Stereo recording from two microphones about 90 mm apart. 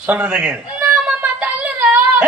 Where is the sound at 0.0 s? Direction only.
15° right (ahead or behind).